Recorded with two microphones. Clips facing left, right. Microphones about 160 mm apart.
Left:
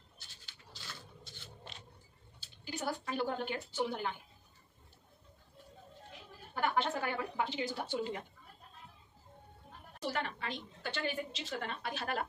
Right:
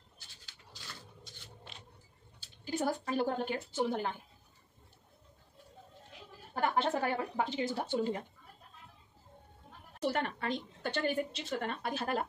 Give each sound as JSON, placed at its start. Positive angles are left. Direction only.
{"t": 2.6, "sound": "speech", "side_deg": -40}
{"t": 6.5, "sound": "speech", "side_deg": -40}
{"t": 10.0, "sound": "a woman's voice", "side_deg": -50}